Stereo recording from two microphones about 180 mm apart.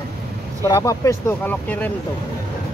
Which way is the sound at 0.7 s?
20° left (ahead or behind).